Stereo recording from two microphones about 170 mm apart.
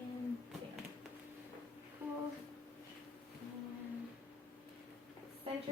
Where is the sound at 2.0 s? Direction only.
15° right (ahead or behind).